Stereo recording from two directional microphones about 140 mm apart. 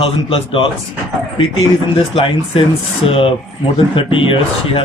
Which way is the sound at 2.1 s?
40° left (ahead or behind).